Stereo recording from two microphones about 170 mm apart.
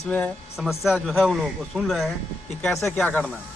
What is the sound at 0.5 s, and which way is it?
Speech, centre (ahead or behind).